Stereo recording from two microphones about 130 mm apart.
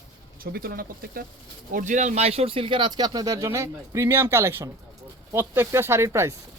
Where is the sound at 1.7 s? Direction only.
70° right (ahead or behind).